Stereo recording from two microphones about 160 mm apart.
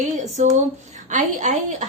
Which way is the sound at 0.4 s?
50° right (ahead or behind).